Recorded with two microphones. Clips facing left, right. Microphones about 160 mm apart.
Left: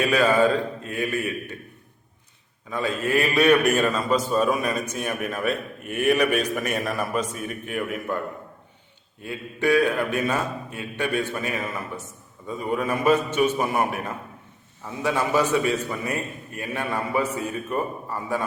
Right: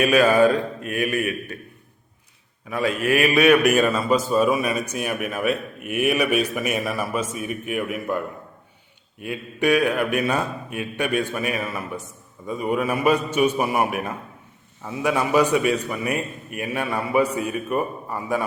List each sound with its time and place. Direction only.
0.0 s a man's voice: 15° right (ahead or behind)
2.6 s a man's voice: 15° right (ahead or behind)
9.2 s a man's voice: 15° right (ahead or behind)
15.0 s a man's voice: 15° right (ahead or behind)